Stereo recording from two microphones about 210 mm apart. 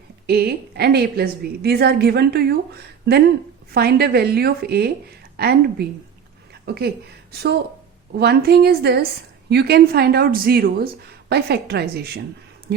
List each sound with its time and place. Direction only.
0.3 s a woman's voice: 50° right (ahead or behind)
6.5 s a sound: 50° right (ahead or behind)
7.3 s a woman's voice: 50° right (ahead or behind)